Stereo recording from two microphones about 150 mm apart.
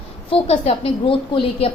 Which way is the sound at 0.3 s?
40° left (ahead or behind).